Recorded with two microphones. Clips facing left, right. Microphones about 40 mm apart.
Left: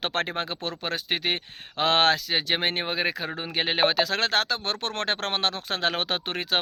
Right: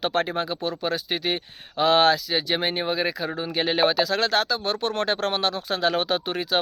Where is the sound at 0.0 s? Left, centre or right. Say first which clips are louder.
Right 3 dB; left.